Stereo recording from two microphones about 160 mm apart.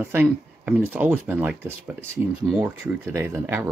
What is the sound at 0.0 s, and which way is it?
Speech, 10° right (ahead or behind).